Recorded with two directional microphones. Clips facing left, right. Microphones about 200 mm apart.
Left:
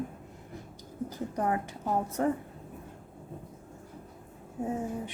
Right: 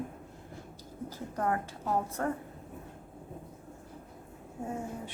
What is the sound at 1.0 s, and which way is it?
A woman's voice, 15° left (ahead or behind).